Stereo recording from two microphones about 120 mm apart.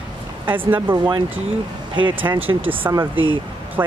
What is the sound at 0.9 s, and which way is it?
Speech, 45° right (ahead or behind).